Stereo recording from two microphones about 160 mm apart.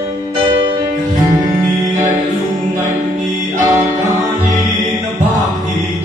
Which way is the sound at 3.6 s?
20° right (ahead or behind).